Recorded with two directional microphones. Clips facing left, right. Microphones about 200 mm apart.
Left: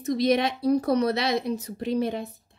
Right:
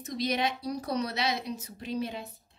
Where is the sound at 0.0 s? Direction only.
55° left (ahead or behind).